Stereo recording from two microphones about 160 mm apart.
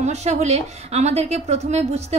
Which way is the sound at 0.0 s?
45° right (ahead or behind).